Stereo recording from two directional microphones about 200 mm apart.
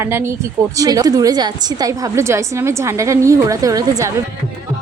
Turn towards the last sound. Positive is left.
turn(degrees=-15)  # may be behind; listen again after turning